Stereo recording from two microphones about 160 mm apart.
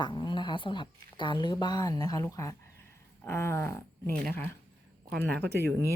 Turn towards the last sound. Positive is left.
turn(degrees=-90)